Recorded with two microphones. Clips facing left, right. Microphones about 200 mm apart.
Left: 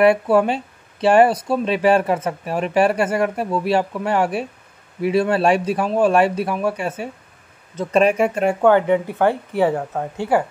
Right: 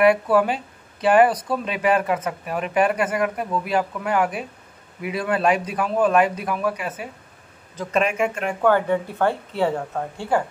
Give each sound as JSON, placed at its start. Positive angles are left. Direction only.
{"t": 0.0, "sound": "speech", "side_deg": 25}
{"t": 8.6, "sound": "speech", "side_deg": 20}